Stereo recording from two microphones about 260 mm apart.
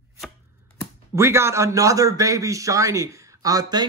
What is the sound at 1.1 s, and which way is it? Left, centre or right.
Speech, centre.